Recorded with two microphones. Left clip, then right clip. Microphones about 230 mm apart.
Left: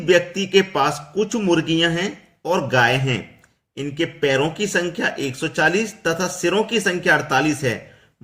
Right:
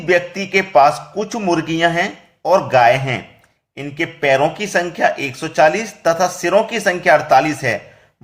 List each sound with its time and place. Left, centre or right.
0.0 s speech: centre